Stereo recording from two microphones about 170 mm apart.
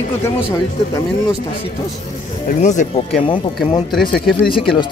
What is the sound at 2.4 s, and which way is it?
Speech, 45° left (ahead or behind).